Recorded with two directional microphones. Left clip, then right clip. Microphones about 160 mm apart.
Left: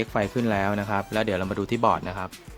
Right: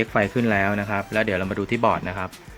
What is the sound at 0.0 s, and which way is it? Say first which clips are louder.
Speech: right 4 dB; 10° left (ahead or behind).